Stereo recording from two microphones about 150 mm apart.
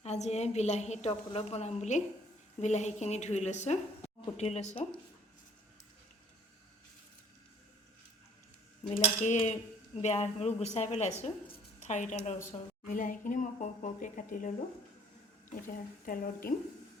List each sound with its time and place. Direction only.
0.0 s a woman's voice: 45° left (ahead or behind)
8.9 s a woman's voice: 55° left (ahead or behind)
12.5 s speech: 60° left (ahead or behind)
15.6 s speech: 70° left (ahead or behind)